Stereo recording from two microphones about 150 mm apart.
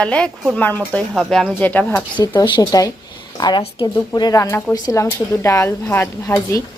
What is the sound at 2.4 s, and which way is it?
A woman's voice, 25° left (ahead or behind).